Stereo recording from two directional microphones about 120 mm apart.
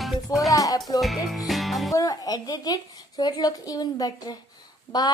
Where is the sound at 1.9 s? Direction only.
30° left (ahead or behind).